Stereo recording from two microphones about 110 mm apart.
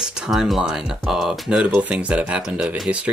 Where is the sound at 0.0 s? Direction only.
5° right (ahead or behind).